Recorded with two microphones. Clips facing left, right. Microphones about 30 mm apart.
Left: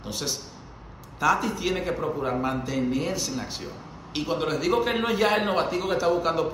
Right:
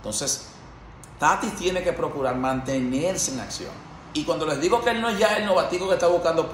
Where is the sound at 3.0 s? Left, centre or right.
Left.